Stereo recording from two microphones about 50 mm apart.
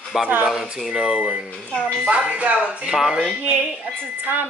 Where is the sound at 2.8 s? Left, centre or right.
Centre.